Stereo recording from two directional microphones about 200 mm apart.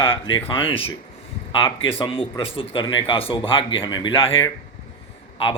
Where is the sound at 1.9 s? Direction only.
25° left (ahead or behind).